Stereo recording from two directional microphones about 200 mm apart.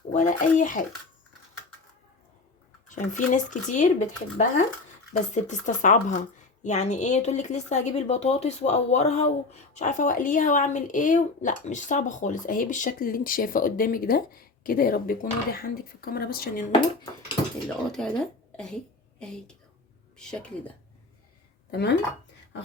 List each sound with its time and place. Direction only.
0.1 s speech: 40° left (ahead or behind)
2.9 s speech: 40° left (ahead or behind)
18.0 s a woman's voice: 5° left (ahead or behind)
21.7 s speech: 55° left (ahead or behind)